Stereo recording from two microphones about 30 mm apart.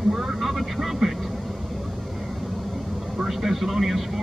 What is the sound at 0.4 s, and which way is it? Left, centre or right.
Vehicle, centre.